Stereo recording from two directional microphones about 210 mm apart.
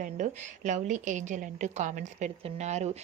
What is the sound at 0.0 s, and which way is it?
A woman's voice, 35° right (ahead or behind).